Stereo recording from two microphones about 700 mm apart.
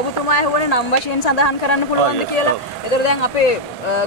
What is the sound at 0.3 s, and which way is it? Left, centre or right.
Speech, left.